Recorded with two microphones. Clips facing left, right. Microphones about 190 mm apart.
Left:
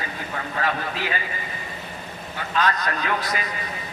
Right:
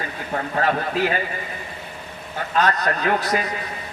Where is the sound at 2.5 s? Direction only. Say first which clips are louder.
Right 3 dB; 40° right (ahead or behind).